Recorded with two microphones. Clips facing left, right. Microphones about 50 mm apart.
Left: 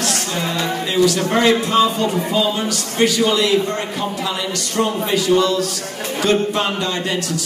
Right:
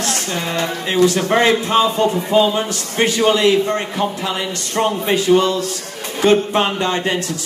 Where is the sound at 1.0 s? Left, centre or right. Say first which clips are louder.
Right 2 dB; right.